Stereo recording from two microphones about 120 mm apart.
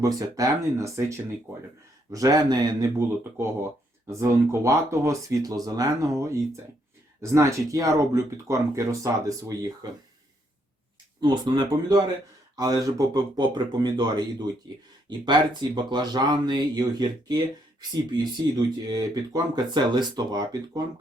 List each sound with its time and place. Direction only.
0.0 s speech: 30° right (ahead or behind)
3.3 s speech: 20° right (ahead or behind)
11.2 s speech: 40° right (ahead or behind)